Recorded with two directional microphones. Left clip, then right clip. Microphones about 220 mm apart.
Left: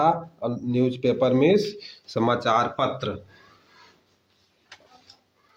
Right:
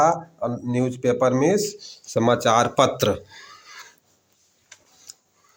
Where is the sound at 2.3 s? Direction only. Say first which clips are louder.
Right 4 dB; 35° right (ahead or behind).